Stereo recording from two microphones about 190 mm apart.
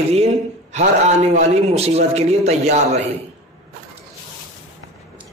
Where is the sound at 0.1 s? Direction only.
35° right (ahead or behind).